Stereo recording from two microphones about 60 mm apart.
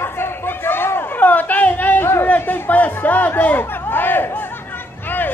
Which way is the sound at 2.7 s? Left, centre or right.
Left.